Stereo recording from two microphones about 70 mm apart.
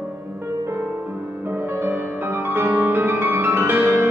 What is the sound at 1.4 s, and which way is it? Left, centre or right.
Music, right.